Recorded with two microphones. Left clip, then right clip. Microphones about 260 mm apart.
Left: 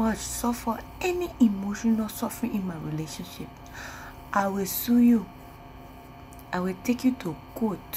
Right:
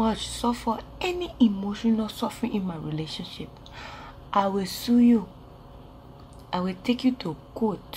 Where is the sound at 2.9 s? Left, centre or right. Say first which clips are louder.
Right 2 dB; left.